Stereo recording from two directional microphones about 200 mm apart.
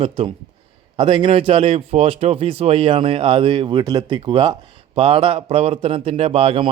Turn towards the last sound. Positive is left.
turn(degrees=-30)  # may be behind; listen again after turning